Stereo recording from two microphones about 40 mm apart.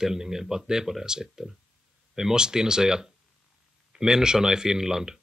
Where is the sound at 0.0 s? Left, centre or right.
Centre.